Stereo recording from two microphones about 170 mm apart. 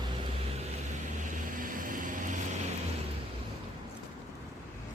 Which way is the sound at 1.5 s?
55° right (ahead or behind).